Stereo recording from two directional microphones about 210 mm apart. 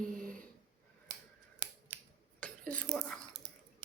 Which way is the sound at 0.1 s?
40° right (ahead or behind).